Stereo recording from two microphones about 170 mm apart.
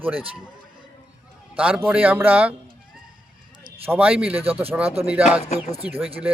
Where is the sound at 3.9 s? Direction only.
10° right (ahead or behind).